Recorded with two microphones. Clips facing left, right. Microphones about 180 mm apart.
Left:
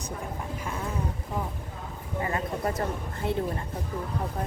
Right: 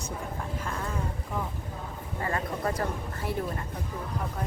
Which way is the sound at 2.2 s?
20° left (ahead or behind).